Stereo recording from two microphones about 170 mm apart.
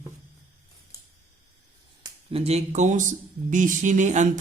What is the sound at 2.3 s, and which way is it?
Mantra, 40° right (ahead or behind).